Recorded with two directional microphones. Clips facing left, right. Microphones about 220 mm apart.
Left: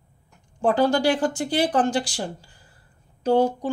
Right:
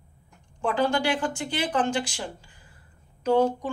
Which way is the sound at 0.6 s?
35° left (ahead or behind).